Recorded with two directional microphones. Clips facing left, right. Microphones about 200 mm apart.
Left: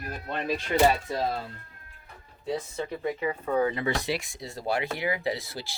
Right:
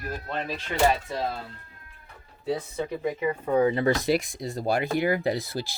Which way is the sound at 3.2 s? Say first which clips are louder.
Right 4 dB; 15° right (ahead or behind).